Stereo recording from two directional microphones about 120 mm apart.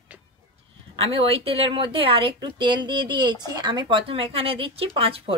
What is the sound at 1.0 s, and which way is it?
Speech, 55° right (ahead or behind).